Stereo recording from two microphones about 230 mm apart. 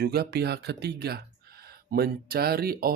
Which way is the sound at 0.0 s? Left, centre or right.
Right.